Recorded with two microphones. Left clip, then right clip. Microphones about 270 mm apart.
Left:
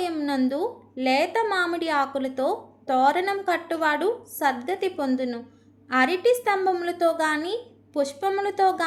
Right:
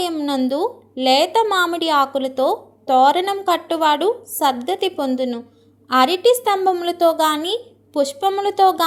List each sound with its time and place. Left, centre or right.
0.0 s a woman's voice: centre